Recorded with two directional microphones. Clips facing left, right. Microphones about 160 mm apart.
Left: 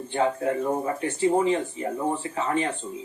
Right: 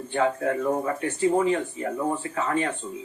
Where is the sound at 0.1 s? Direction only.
25° left (ahead or behind).